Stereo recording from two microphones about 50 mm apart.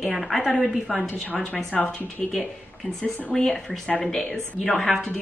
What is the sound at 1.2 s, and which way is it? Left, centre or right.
Speech, left.